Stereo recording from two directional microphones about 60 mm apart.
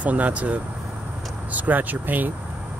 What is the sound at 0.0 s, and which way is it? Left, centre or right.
Speech, right.